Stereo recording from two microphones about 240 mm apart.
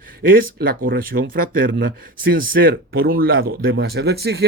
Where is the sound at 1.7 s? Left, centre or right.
Right.